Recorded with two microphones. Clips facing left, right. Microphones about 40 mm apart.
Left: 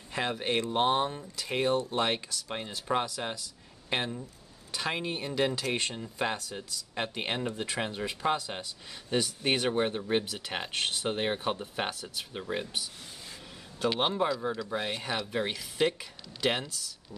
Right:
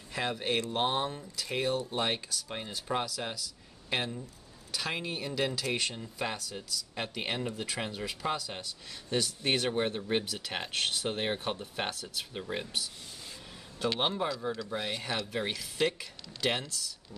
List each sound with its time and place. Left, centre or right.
0.1 s speech: centre
10.2 s speech: centre
10.5 s speech: centre